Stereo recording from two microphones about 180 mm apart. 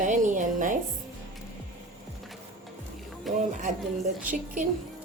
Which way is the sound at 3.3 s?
Centre (ahead or behind).